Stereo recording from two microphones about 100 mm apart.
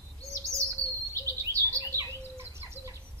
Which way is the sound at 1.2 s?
30° right (ahead or behind).